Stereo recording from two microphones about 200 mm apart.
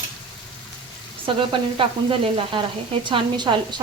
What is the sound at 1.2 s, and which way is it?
A woman's voice, 25° right (ahead or behind).